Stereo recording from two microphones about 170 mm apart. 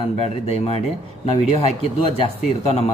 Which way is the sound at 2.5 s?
40° left (ahead or behind).